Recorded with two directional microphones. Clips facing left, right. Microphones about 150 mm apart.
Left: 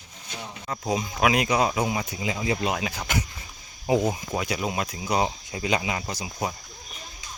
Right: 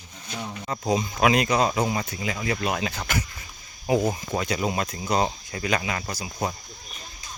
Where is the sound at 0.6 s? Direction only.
Centre (ahead or behind); by 3.2 s 15° left (ahead or behind).